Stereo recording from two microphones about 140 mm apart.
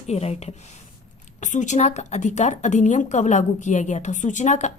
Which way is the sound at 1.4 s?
60° left (ahead or behind).